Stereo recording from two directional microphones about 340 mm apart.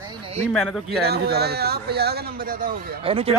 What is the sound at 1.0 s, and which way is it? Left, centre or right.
Speech, right.